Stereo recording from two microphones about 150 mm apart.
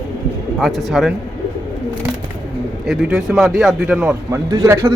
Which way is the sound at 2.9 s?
5° right (ahead or behind).